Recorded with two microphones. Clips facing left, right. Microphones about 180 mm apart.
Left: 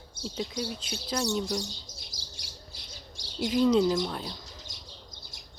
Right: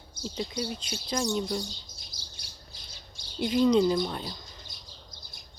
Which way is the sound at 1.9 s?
90° left.